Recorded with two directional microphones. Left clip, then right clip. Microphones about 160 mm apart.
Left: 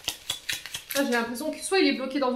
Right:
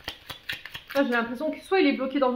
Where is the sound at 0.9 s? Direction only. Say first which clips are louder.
Right 2 dB; 30° right (ahead or behind).